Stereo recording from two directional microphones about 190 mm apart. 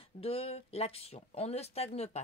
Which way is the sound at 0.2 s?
30° left (ahead or behind).